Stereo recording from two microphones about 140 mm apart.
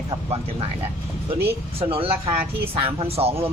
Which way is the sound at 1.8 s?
40° right (ahead or behind).